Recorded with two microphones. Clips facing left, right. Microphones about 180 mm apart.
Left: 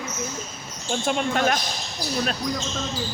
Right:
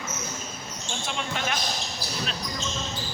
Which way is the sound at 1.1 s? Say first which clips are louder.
Left 9 dB; 50° left (ahead or behind).